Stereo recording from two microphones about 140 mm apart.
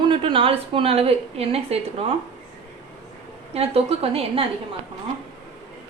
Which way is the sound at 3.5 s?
45° right (ahead or behind).